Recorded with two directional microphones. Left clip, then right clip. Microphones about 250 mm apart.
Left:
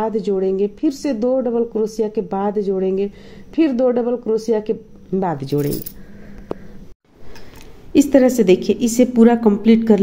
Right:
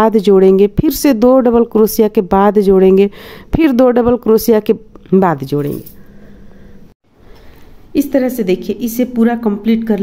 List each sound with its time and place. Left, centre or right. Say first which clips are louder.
0.0 s speech: right 11 dB; right; by 5.8 s centre
7.9 s a woman's voice: left 1 dB; centre